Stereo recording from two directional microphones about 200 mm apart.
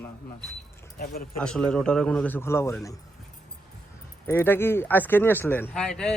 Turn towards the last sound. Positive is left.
turn(degrees=5)  # may be behind; listen again after turning